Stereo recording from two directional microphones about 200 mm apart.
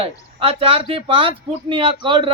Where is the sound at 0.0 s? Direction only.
30° right (ahead or behind).